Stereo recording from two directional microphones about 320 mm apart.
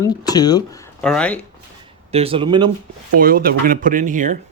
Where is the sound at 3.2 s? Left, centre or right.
Right.